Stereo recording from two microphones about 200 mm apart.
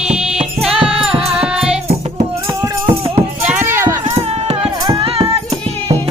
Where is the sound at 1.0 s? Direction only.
5° right (ahead or behind).